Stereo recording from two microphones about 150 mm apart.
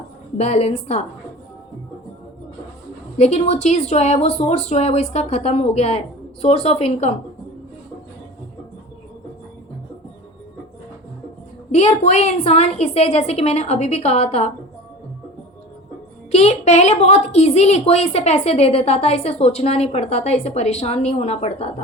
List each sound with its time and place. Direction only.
0.3 s a woman's voice: 50° left (ahead or behind)
3.2 s a woman's voice: 50° left (ahead or behind)
11.7 s a woman's voice: 50° left (ahead or behind)
16.3 s a woman's voice: 50° left (ahead or behind)